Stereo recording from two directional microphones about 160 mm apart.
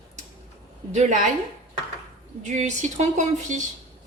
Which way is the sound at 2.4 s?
45° right (ahead or behind).